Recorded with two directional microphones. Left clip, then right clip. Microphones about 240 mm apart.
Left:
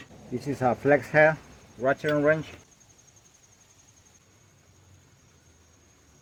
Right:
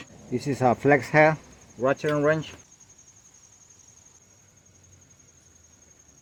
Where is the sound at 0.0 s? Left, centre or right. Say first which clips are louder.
Right 4 dB; right.